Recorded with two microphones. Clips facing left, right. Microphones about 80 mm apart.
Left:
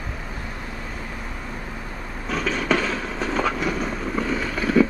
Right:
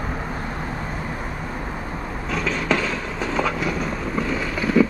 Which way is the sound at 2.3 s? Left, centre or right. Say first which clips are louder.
Even; centre.